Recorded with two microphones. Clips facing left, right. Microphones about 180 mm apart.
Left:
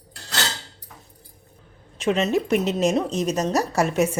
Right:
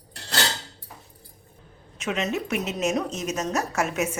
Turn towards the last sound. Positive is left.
turn(degrees=35)  # may be behind; listen again after turning